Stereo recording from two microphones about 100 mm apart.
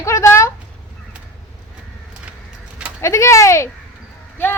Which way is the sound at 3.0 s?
30° left (ahead or behind).